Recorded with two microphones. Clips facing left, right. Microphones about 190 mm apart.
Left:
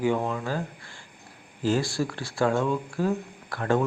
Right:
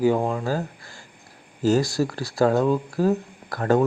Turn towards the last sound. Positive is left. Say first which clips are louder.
# right 4 dB
turn(degrees=-40)  # may be behind; listen again after turning